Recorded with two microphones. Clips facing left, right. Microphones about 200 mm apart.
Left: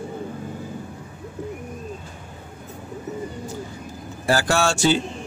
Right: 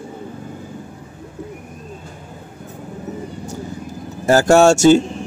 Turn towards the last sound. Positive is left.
turn(degrees=-45)  # may be behind; listen again after turning